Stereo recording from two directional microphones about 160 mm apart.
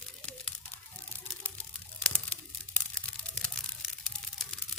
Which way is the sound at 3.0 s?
5° left (ahead or behind).